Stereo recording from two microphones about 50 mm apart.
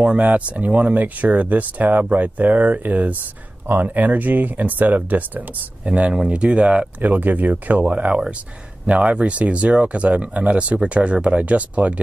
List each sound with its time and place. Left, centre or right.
0.0 s speech: right
5.9 s speech: right
7.0 s speech: right